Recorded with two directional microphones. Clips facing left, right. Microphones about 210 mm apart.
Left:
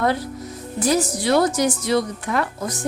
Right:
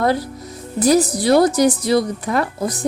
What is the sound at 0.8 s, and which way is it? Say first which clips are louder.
A woman's voice: right 5 dB; 35° right (ahead or behind).